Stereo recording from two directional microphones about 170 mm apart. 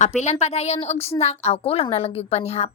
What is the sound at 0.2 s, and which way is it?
A woman's voice, 40° left (ahead or behind).